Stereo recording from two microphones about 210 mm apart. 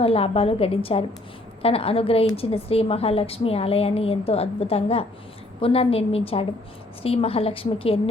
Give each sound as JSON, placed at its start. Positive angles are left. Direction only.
{"t": 0.0, "sound": "a woman's voice", "side_deg": 30}